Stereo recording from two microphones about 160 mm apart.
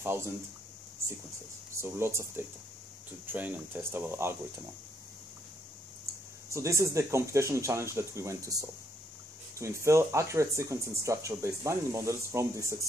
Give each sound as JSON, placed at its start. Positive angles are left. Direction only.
{"t": 0.0, "sound": "speech", "side_deg": -15}
{"t": 1.8, "sound": "speech", "side_deg": -15}
{"t": 6.5, "sound": "speech", "side_deg": -20}